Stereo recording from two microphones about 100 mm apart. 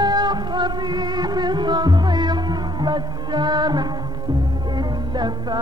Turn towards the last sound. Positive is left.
turn(degrees=-45)  # may be behind; listen again after turning